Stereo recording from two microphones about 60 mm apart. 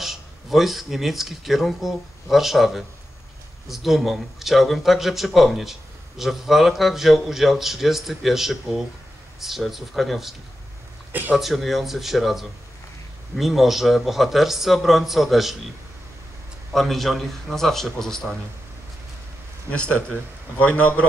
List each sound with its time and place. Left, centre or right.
0.0 s speech: centre
11.1 s speech: right
11.3 s speech: centre
16.7 s speech: centre
19.7 s a man's voice: left